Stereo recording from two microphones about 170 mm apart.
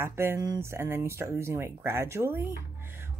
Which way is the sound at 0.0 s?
15° right (ahead or behind).